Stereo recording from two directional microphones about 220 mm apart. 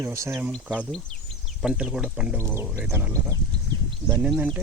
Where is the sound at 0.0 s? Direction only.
15° right (ahead or behind).